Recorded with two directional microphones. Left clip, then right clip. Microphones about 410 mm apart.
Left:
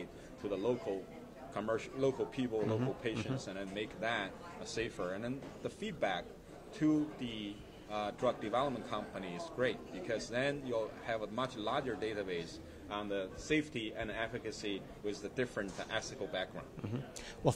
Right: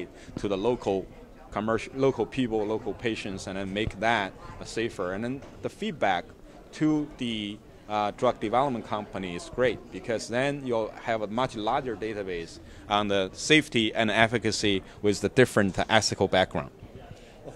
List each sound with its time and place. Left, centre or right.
0.4 s speech: right
12.8 s a man's voice: right